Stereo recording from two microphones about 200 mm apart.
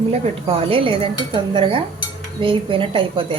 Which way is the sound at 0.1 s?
30° right (ahead or behind).